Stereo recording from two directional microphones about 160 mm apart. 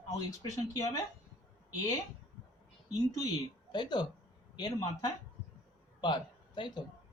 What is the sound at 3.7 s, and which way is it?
Speech, 30° left (ahead or behind).